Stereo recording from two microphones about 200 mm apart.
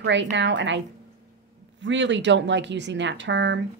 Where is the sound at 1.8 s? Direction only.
65° right (ahead or behind).